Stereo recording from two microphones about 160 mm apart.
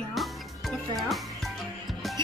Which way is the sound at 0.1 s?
Centre (ahead or behind).